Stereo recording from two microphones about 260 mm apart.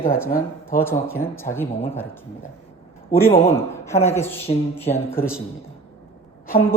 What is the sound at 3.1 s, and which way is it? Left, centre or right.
A woman's voice, centre.